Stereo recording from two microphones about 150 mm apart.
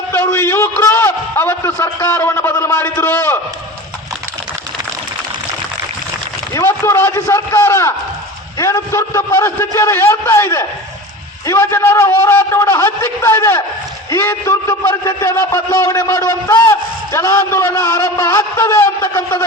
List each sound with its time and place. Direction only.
0.1 s a man's voice: 15° left (ahead or behind)
6.5 s a man's voice: 20° left (ahead or behind)